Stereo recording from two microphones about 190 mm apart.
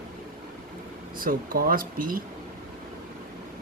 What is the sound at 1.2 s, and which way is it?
Speech, 50° right (ahead or behind).